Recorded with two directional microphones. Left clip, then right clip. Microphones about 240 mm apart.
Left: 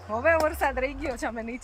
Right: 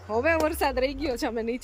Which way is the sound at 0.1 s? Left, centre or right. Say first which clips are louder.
Left 1 dB; centre.